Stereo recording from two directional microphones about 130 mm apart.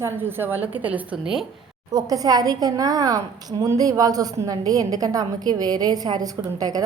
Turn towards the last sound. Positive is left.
turn(degrees=-30)  # may be behind; listen again after turning